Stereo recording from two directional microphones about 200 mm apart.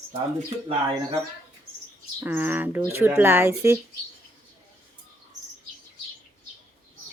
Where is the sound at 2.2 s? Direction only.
10° right (ahead or behind).